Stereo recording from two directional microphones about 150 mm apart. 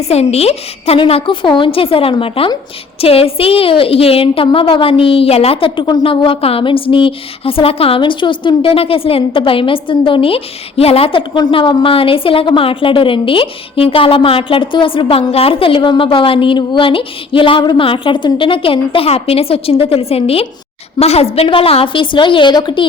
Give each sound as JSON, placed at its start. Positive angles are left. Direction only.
{"t": 0.1, "sound": "a woman's voice", "side_deg": 45}